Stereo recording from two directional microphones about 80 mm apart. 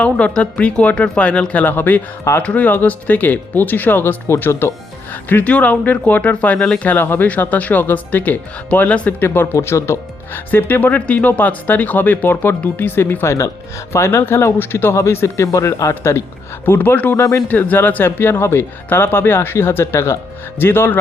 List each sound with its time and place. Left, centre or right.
0.0 s speech: centre; by 16.2 s left
16.6 s speech: left
17.2 s speech: left
17.5 s speech: left